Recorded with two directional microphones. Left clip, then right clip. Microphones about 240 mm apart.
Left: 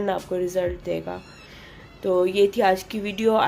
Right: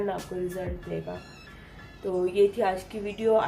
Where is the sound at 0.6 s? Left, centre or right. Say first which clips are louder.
Left 10 dB; left.